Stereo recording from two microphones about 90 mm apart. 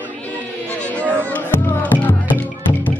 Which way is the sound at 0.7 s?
15° left (ahead or behind).